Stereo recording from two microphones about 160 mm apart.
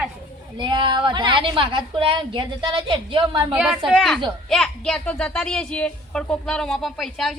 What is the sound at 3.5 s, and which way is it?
A child's voice, 5° right (ahead or behind).